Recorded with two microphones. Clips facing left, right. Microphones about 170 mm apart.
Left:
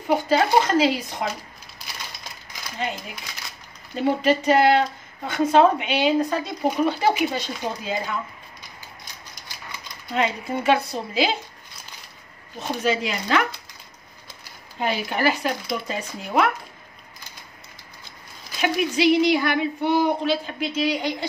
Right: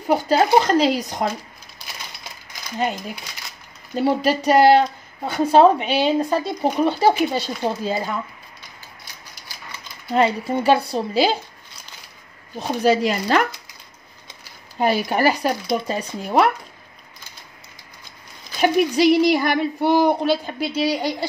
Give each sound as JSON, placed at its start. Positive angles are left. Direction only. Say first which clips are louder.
{"t": 0.1, "sound": "speech", "louder": "right 3 dB", "side_deg": -40}
{"t": 3.9, "sound": "speech", "louder": "right 1 dB", "side_deg": -40}
{"t": 10.1, "sound": "speech", "louder": "right 5 dB", "side_deg": -35}
{"t": 12.5, "sound": "speech", "louder": "right 6 dB", "side_deg": -40}
{"t": 14.8, "sound": "speech", "louder": "right 5 dB", "side_deg": -40}
{"t": 18.6, "sound": "speech", "louder": "right 5 dB", "side_deg": -40}